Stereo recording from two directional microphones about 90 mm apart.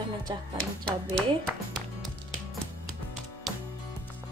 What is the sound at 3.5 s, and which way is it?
Music, 5° right (ahead or behind).